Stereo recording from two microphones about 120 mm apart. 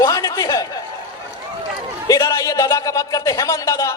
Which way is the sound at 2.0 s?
30° left (ahead or behind).